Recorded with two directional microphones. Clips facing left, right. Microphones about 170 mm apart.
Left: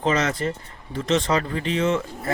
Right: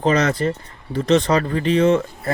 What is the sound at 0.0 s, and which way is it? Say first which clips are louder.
Speech: right 4 dB; 40° right (ahead or behind).